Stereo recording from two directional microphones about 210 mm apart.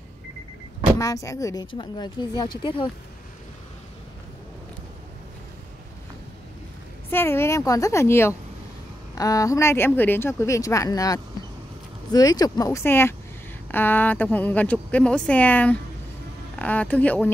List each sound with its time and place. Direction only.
0.9 s speech: 15° left (ahead or behind)
7.1 s speech: 10° left (ahead or behind)